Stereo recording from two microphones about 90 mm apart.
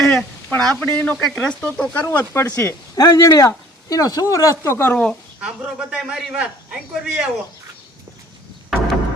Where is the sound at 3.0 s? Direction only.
40° left (ahead or behind).